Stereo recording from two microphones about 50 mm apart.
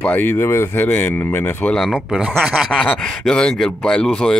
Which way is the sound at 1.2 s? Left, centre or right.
Left.